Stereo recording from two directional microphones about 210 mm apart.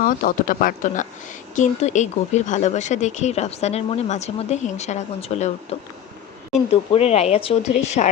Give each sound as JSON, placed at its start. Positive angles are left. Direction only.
{"t": 0.0, "sound": "speech", "side_deg": 40}
{"t": 6.7, "sound": "speech", "side_deg": 30}